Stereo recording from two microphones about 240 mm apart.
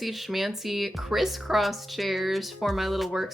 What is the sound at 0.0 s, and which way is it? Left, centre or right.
A woman's voice, centre.